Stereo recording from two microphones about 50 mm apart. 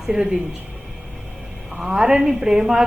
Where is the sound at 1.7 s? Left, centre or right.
Centre.